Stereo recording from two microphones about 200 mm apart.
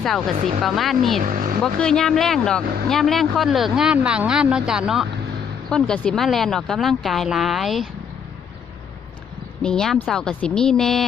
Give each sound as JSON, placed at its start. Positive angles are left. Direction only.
{"t": 0.3, "sound": "speech", "side_deg": -30}
{"t": 0.6, "sound": "speech", "side_deg": 0}
{"t": 1.2, "sound": "speech", "side_deg": -40}
{"t": 1.6, "sound": "speech", "side_deg": 5}
{"t": 9.6, "sound": "speech", "side_deg": 5}